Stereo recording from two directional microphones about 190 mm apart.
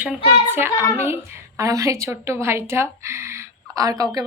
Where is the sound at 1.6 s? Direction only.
15° right (ahead or behind).